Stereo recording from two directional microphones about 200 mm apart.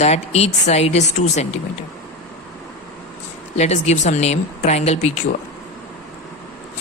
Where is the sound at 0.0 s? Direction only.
35° left (ahead or behind).